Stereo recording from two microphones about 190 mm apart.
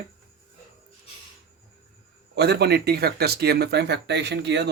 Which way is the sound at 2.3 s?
60° right (ahead or behind).